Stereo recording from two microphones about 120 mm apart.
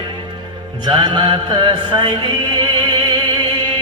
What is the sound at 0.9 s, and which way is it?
Mantra, 35° right (ahead or behind).